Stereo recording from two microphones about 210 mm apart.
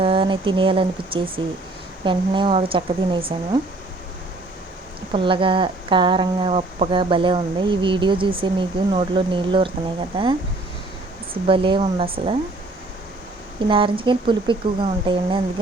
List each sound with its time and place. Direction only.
0.0 s speech: 25° right (ahead or behind)
5.1 s speech: 25° right (ahead or behind)
11.4 s speech: 25° right (ahead or behind)
13.7 s speech: 25° right (ahead or behind)